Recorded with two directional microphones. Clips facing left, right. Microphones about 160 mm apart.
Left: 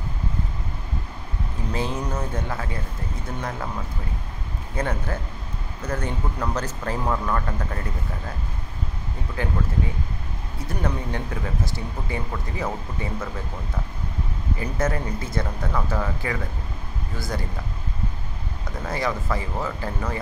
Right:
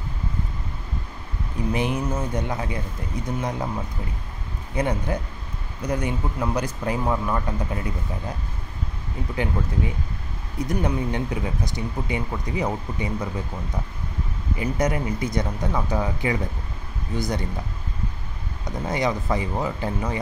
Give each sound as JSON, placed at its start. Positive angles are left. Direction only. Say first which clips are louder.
{"t": 1.7, "sound": "speech", "louder": "right 3 dB", "side_deg": -15}
{"t": 4.7, "sound": "speech", "louder": "right 3 dB", "side_deg": -15}
{"t": 10.7, "sound": "speech", "louder": "right 3 dB", "side_deg": -15}
{"t": 14.6, "sound": "speech", "louder": "right 3 dB", "side_deg": -15}
{"t": 18.9, "sound": "speech", "louder": "right 2 dB", "side_deg": -20}